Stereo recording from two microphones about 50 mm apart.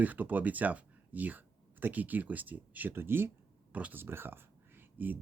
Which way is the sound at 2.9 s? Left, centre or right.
Right.